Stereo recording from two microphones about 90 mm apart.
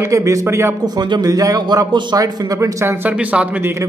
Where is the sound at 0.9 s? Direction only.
45° right (ahead or behind).